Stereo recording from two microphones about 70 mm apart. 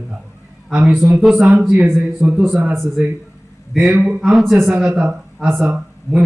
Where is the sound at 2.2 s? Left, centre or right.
Centre.